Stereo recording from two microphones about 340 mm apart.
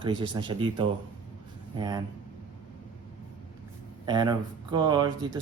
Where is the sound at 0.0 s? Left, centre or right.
Centre.